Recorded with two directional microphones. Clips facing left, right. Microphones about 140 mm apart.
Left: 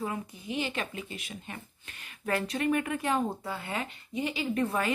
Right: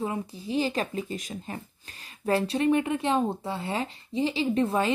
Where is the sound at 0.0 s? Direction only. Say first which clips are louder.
Right 4 dB; 30° right (ahead or behind).